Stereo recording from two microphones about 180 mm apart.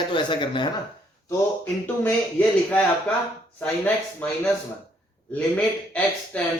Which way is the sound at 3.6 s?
5° left (ahead or behind).